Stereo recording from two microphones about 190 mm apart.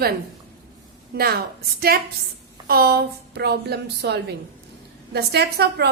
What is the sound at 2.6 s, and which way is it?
A woman's voice, 55° right (ahead or behind).